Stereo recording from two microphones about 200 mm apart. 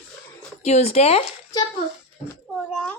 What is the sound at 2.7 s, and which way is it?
Speech, 5° left (ahead or behind).